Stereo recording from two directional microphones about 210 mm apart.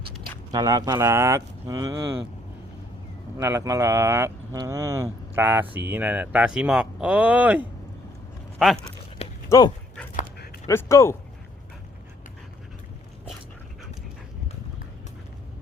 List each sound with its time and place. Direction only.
0.5 s speech: 15° right (ahead or behind)
3.3 s speech: 15° right (ahead or behind); by 8.9 s centre (ahead or behind)
9.5 s speech: 20° left (ahead or behind)
10.2 s dog: 45° left (ahead or behind)
10.7 s speech: 10° left (ahead or behind)